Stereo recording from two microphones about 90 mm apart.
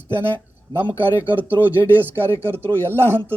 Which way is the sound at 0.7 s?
20° right (ahead or behind).